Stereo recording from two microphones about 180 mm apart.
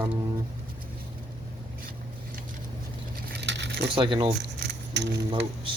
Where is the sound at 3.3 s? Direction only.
75° right (ahead or behind).